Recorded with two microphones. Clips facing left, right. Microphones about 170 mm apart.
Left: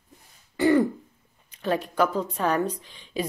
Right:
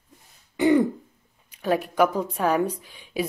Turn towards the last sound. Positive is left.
turn(degrees=-10)  # may be behind; listen again after turning